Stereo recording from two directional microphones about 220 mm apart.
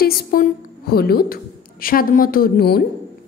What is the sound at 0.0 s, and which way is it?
A woman's voice, 40° left (ahead or behind).